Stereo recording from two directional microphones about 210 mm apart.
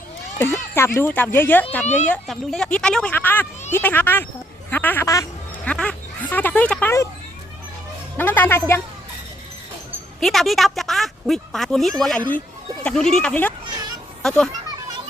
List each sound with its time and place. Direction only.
0.3 s speech: 10° left (ahead or behind)
1.8 s speech: 35° left (ahead or behind)
2.0 s speech: centre (ahead or behind)
8.2 s speech: 10° left (ahead or behind)
10.2 s a child's voice: centre (ahead or behind)